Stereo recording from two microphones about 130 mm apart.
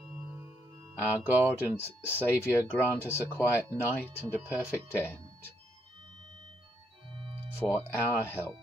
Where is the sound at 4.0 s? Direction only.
15° right (ahead or behind).